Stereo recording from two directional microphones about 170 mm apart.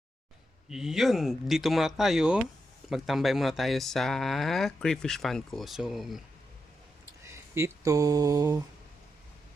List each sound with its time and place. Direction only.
0.7 s speech: 5° right (ahead or behind)
7.3 s speech: 15° right (ahead or behind)